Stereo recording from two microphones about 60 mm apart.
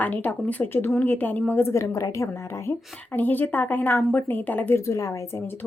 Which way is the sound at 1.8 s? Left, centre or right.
Left.